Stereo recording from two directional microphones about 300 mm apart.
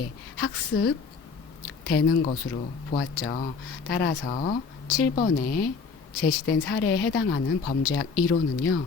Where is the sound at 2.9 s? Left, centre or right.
Left.